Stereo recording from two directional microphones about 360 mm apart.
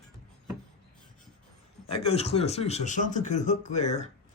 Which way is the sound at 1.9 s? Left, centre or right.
Centre.